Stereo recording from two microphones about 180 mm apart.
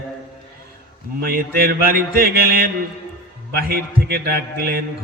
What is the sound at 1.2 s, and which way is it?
Speech, 55° right (ahead or behind).